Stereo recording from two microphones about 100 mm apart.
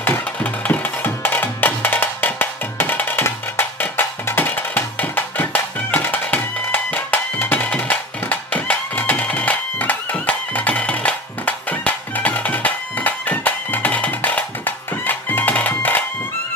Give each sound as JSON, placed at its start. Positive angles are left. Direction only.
{"t": 0.0, "sound": "music", "side_deg": 15}